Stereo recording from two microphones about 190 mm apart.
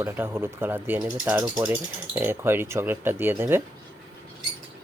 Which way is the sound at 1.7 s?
10° right (ahead or behind).